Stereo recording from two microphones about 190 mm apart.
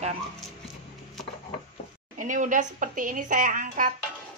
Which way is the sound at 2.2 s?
45° right (ahead or behind).